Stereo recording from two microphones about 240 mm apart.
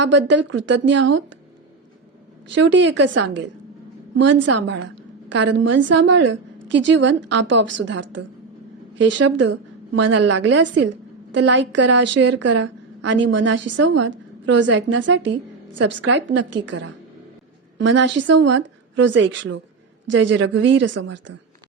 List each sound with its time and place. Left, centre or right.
0.0 s a woman's voice: right
2.6 s a woman's voice: right
17.7 s a woman's voice: right